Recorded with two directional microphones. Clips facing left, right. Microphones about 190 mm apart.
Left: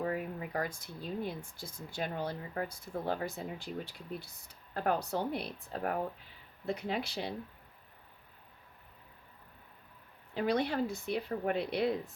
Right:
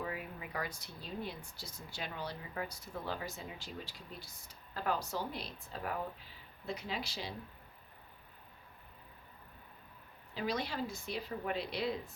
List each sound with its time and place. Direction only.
0.0 s speech: 45° left (ahead or behind)
10.3 s speech: 55° left (ahead or behind)